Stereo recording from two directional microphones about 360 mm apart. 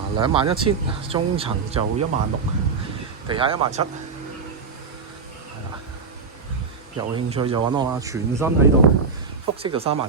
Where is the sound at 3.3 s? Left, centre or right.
Centre.